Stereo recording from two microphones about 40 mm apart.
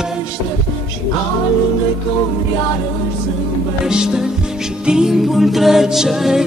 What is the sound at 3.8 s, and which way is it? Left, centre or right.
Music, centre.